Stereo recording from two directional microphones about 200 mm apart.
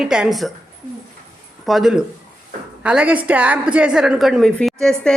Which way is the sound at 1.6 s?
Centre (ahead or behind).